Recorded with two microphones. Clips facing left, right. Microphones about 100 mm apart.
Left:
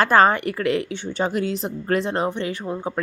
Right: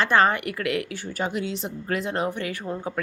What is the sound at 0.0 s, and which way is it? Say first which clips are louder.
A woman's voice: left 4 dB; 40° left (ahead or behind).